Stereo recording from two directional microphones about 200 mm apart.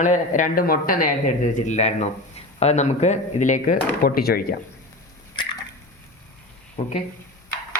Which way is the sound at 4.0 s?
50° left (ahead or behind).